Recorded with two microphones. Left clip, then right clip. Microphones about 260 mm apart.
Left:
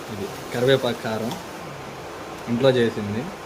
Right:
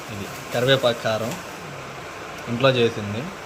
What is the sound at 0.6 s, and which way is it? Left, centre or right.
Speech, centre.